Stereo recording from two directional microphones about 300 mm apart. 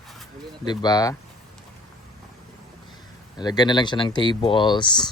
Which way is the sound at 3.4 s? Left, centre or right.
Centre.